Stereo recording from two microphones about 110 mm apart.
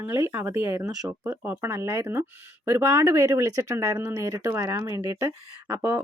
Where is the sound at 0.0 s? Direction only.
20° right (ahead or behind).